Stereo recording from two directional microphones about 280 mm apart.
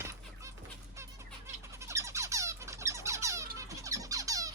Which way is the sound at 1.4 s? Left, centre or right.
Centre.